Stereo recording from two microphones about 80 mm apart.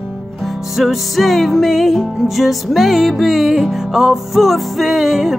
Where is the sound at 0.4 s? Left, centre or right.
Centre.